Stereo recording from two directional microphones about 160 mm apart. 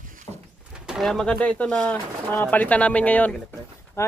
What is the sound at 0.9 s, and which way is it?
Speech, centre (ahead or behind).